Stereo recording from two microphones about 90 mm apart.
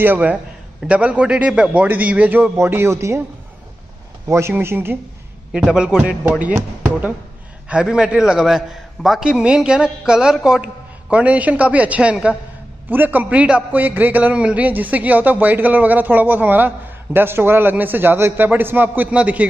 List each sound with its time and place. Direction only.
0.0 s a man's voice: 20° right (ahead or behind)
4.3 s a man's voice: 30° right (ahead or behind)
5.5 s a man's voice: 10° right (ahead or behind)